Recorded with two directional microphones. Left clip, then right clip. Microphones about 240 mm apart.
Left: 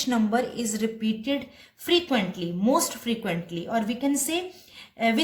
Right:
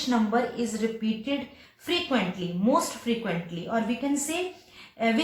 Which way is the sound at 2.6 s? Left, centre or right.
Left.